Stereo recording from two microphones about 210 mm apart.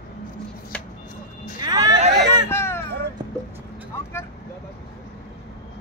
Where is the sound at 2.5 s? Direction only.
10° left (ahead or behind).